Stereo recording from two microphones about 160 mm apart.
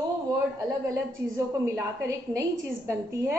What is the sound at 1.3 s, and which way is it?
A woman's voice, 20° right (ahead or behind).